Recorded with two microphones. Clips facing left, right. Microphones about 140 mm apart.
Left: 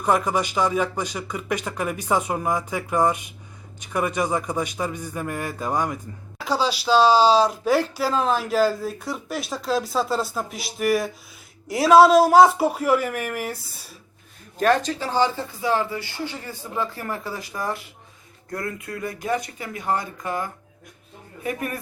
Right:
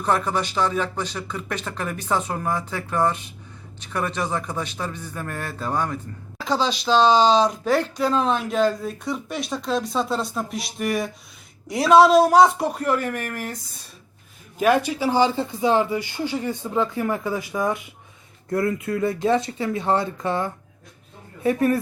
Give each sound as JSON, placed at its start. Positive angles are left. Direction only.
{"t": 0.0, "sound": "speech", "side_deg": 10}
{"t": 14.6, "sound": "speech", "side_deg": -10}
{"t": 18.5, "sound": "speech", "side_deg": -25}